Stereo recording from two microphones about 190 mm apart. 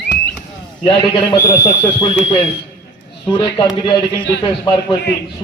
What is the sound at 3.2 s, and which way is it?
Speech, 25° left (ahead or behind).